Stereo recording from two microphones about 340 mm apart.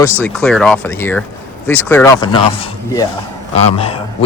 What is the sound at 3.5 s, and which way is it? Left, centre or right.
Speech, centre.